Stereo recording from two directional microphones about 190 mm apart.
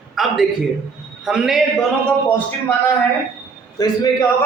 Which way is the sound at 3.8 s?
20° left (ahead or behind).